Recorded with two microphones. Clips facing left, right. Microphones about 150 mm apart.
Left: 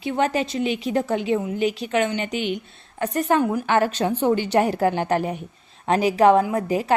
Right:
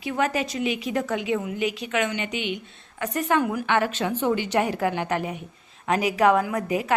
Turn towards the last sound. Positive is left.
turn(degrees=30)  # may be behind; listen again after turning